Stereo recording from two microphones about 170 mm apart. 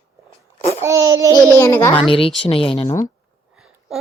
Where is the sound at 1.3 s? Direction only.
15° left (ahead or behind).